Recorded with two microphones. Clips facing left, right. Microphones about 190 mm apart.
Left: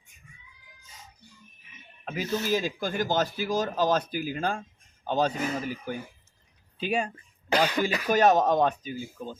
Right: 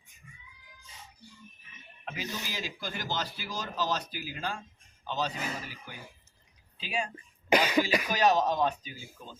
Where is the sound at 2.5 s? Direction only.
50° left (ahead or behind).